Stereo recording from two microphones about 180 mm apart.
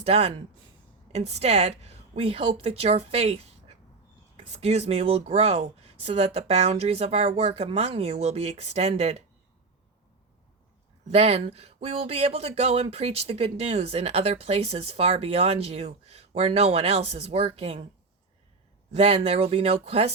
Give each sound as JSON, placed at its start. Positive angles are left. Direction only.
{"t": 0.0, "sound": "a woman's voice", "side_deg": -35}
{"t": 11.1, "sound": "speech", "side_deg": -35}
{"t": 18.9, "sound": "speech", "side_deg": -35}